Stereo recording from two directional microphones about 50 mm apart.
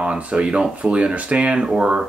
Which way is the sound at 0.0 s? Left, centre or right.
Right.